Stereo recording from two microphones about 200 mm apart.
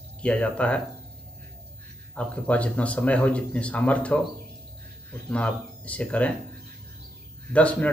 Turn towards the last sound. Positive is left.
turn(degrees=5)  # may be behind; listen again after turning